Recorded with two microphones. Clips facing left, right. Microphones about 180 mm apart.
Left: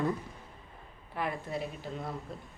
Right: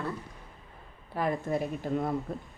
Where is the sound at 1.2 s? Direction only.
45° right (ahead or behind).